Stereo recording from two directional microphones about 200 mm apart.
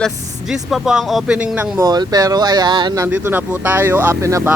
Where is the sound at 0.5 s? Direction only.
5° right (ahead or behind).